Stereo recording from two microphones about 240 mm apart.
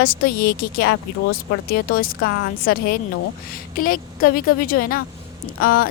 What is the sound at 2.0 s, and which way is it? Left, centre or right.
A woman's voice, left.